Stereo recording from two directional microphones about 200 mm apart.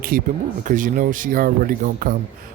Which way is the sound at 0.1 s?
45° right (ahead or behind).